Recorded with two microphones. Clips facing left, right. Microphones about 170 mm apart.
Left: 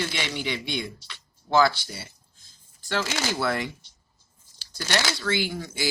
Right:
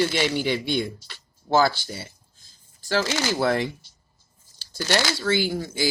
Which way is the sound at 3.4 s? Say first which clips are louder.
Right 5 dB; 30° right (ahead or behind).